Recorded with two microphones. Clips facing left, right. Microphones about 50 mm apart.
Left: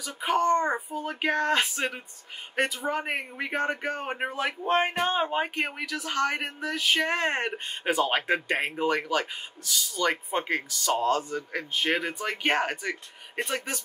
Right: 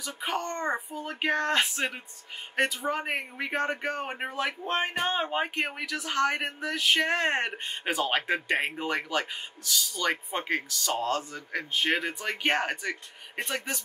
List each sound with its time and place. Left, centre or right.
0.0 s speech: centre
0.4 s a child's voice: left
0.7 s speech: centre